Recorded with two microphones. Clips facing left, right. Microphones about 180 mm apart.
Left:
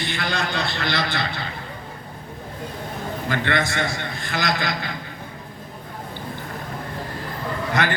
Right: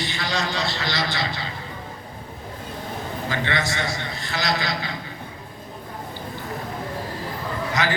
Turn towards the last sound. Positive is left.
turn(degrees=55)  # may be behind; listen again after turning